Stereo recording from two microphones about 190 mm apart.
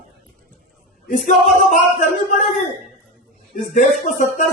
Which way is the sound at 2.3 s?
45° left (ahead or behind).